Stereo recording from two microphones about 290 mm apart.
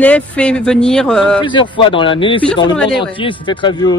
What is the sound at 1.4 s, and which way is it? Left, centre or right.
Speech, centre.